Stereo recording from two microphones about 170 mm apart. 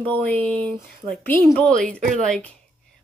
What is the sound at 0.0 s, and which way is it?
A woman's voice, 10° left (ahead or behind).